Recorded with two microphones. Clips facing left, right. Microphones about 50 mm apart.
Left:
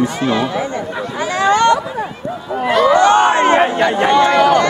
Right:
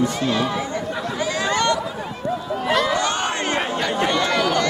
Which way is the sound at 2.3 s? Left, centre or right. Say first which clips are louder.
Left 3 dB; centre.